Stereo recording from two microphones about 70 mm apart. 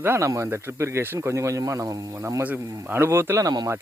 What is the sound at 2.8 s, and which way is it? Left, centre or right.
Speech, right.